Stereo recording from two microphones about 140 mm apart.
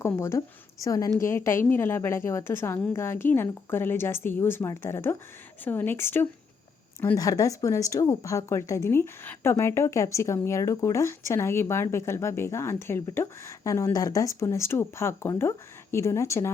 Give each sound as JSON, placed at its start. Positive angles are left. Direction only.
{"t": 0.0, "sound": "a woman's voice", "side_deg": 20}